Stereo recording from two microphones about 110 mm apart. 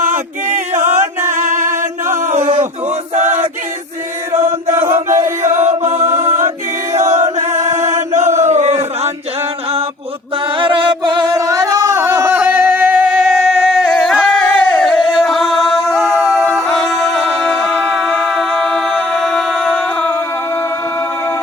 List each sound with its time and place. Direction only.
0.0 s chant: 90° right
2.0 s a sound: 90° right
3.2 s chant: 90° right
4.3 s chant: 25° right (ahead or behind)
4.9 s chant: 90° right
10.6 s music: 50° right (ahead or behind)
11.3 s singing: 30° right (ahead or behind)
11.9 s a sound: 20° right (ahead or behind)
12.4 s singing: 15° right (ahead or behind)
13.7 s a sound: centre (ahead or behind)
16.6 s music: 5° left (ahead or behind)